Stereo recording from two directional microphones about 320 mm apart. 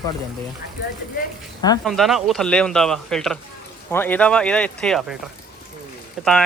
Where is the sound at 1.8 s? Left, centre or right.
Centre.